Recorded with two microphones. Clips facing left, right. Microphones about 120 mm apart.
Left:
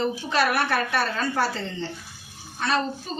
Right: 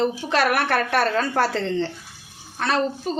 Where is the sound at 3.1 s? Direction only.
70° right (ahead or behind).